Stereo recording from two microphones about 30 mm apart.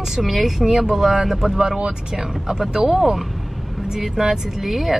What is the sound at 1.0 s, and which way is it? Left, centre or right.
A woman's voice, centre.